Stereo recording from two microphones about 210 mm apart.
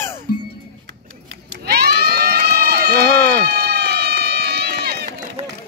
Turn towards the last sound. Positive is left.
turn(degrees=-50)  # may be behind; listen again after turning